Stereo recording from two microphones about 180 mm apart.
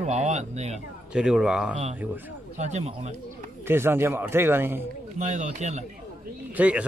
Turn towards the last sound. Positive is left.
turn(degrees=-10)  # may be behind; listen again after turning